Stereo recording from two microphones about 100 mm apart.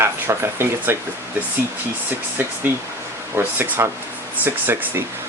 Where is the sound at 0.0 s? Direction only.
25° right (ahead or behind).